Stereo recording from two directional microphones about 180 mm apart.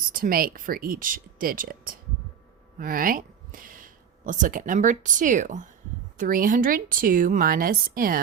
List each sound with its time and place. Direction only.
0.1 s a woman's voice: 50° right (ahead or behind)